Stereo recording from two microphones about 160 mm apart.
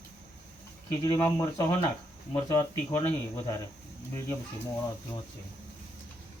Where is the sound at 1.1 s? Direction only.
20° left (ahead or behind).